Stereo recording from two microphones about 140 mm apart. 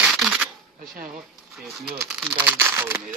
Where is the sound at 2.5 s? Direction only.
15° right (ahead or behind).